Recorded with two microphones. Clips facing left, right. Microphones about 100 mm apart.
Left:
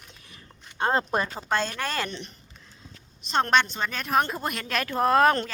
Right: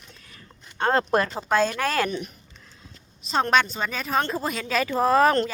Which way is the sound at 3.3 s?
Centre (ahead or behind).